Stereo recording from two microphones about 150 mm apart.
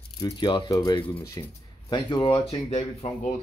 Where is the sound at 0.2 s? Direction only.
30° left (ahead or behind).